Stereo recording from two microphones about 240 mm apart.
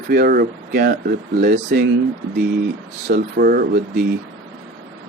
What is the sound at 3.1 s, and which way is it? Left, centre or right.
Speech, right.